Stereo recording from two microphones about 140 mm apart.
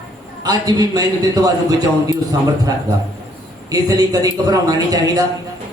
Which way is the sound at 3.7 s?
25° right (ahead or behind).